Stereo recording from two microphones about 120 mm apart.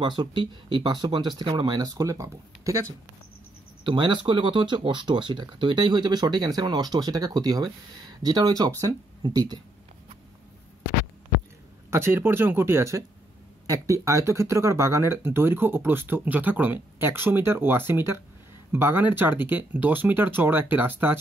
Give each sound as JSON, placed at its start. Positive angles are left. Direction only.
{"t": 0.0, "sound": "speech", "side_deg": -40}
{"t": 3.8, "sound": "speech", "side_deg": -45}
{"t": 11.9, "sound": "speech", "side_deg": -20}